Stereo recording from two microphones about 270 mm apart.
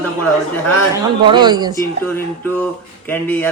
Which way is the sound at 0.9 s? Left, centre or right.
Centre.